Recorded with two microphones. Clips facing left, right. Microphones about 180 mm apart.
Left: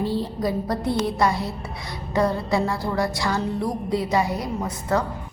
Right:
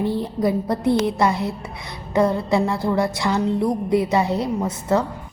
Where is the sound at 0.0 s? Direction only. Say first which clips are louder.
Right 3 dB; 20° right (ahead or behind).